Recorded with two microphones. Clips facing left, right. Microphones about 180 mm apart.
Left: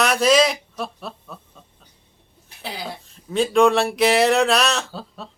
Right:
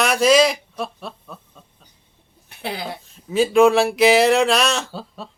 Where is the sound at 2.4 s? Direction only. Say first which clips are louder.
Right 5 dB; 60° right (ahead or behind).